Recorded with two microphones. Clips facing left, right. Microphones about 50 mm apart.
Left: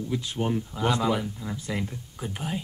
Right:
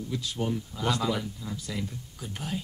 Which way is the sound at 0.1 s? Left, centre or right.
Left.